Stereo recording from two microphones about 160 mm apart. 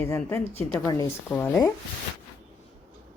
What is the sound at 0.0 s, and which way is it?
A woman's voice, 15° left (ahead or behind).